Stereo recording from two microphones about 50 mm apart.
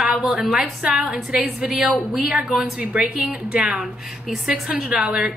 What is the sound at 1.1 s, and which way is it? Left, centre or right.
Speech, right.